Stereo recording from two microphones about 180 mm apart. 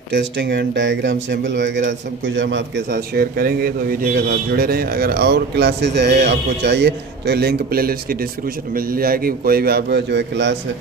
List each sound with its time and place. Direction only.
0.1 s a man's voice: 80° right